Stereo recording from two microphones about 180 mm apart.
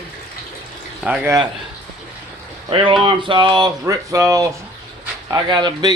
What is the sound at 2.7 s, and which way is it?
A man's voice, 30° right (ahead or behind).